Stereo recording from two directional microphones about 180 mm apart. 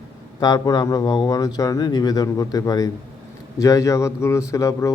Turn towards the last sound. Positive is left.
turn(degrees=15)  # may be behind; listen again after turning